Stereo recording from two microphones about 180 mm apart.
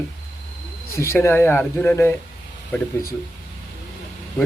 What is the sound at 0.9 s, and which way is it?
A man's voice, 15° left (ahead or behind).